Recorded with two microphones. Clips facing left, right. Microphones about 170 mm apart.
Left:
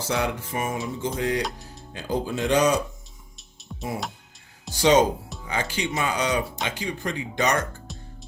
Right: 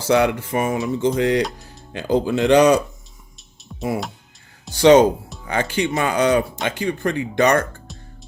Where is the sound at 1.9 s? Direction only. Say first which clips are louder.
Right 8 dB; 75° right (ahead or behind).